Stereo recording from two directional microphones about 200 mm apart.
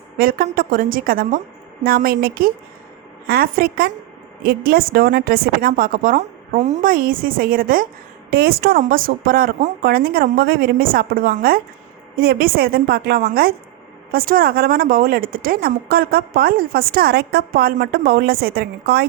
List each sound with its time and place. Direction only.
0.2 s a woman's voice: 45° right (ahead or behind)